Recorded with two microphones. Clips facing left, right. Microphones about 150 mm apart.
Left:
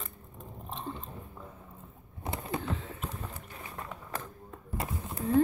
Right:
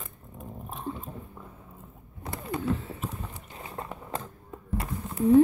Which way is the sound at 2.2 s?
25° left (ahead or behind).